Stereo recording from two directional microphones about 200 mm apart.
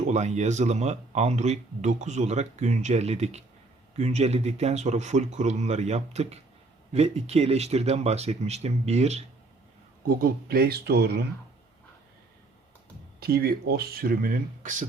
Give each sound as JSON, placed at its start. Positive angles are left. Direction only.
{"t": 0.0, "sound": "speech", "side_deg": -35}
{"t": 10.2, "sound": "speech", "side_deg": -50}
{"t": 13.1, "sound": "speech", "side_deg": -50}